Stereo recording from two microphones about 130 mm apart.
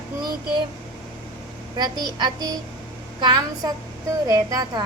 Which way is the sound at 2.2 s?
30° right (ahead or behind).